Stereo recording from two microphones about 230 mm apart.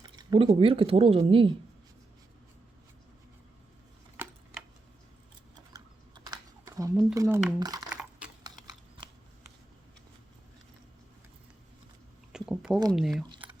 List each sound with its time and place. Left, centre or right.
0.0 s speech: centre
5.7 s typing: centre
6.9 s speech: centre
8.4 s typing: centre
12.3 s a sound: centre
12.9 s speech: centre
13.2 s squish: centre